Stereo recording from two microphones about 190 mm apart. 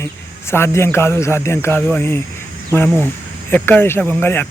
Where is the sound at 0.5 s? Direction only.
15° left (ahead or behind).